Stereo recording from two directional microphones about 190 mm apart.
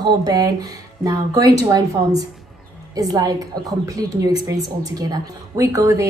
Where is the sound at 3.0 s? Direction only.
20° right (ahead or behind).